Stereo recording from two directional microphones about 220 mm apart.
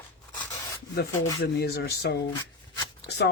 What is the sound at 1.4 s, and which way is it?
Speech, 50° left (ahead or behind).